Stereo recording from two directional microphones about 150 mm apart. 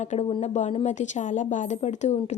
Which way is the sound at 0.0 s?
45° left (ahead or behind).